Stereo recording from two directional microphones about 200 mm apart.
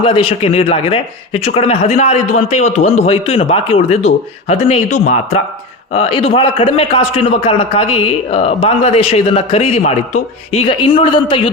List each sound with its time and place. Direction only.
0.0 s a man's voice: 25° left (ahead or behind)